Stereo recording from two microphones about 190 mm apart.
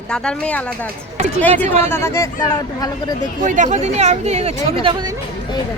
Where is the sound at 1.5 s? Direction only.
35° right (ahead or behind).